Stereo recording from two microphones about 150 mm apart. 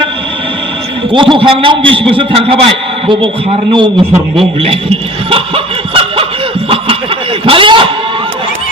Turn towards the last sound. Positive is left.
turn(degrees=-35)  # may be behind; listen again after turning